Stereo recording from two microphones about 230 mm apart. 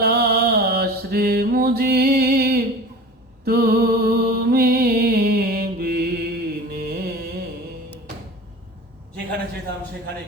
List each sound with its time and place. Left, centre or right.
0.0 s mantra: right
3.4 s music: right